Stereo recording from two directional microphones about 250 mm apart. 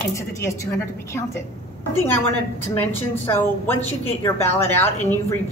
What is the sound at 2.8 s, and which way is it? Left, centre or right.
A woman's voice, centre.